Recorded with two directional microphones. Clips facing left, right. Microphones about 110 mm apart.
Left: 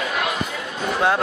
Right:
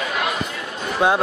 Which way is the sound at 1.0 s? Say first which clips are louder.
Right 2 dB; 20° right (ahead or behind).